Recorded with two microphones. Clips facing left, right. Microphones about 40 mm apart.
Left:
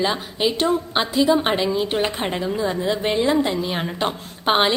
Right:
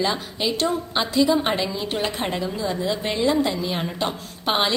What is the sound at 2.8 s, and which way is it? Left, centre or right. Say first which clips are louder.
A woman's voice: left 1 dB; left.